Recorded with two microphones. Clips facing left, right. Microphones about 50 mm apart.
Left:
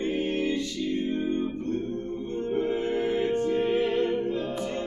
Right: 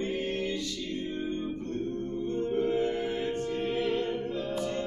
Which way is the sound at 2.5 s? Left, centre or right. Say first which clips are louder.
Left 2 dB; left.